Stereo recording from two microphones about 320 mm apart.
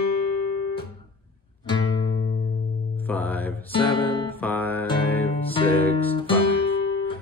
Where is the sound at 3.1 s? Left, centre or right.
Centre.